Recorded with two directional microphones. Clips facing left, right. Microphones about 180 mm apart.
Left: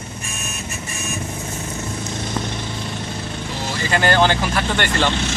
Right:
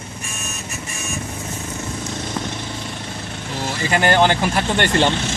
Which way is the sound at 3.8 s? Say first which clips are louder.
Right 1 dB; 20° right (ahead or behind).